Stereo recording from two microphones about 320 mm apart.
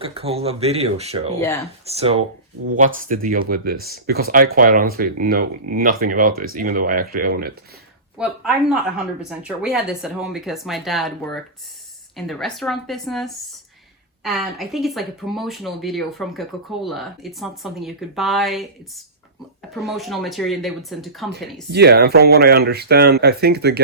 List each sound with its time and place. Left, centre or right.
0.0 s speech: centre
8.2 s speech: centre
21.7 s speech: right